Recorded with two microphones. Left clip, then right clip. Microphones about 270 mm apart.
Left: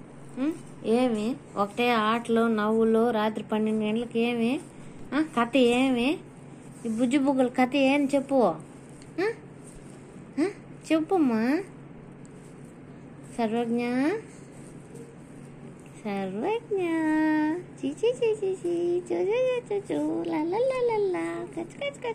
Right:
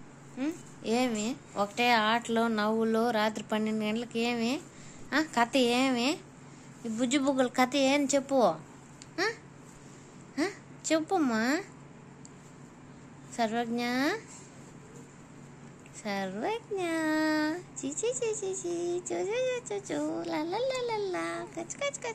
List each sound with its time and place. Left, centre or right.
0.4 s a woman's voice: right
9.1 s babbling: centre
10.3 s a woman's voice: centre
13.4 s a child's voice: centre
16.0 s a child's voice: centre